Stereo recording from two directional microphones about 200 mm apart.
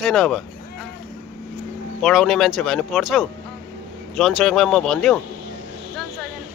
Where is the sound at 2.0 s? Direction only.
Centre (ahead or behind).